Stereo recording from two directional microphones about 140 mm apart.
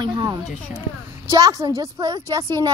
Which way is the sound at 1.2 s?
25° right (ahead or behind).